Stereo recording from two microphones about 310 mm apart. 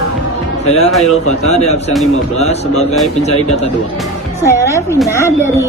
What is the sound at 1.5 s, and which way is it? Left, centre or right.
Speech, left.